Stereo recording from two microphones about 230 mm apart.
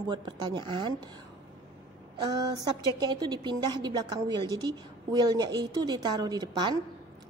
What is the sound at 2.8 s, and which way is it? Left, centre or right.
A woman's voice, centre.